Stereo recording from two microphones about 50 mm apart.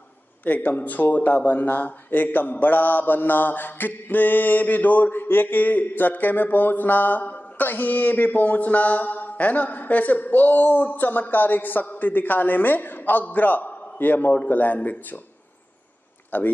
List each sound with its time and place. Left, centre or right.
0.5 s speech: left
16.3 s speech: left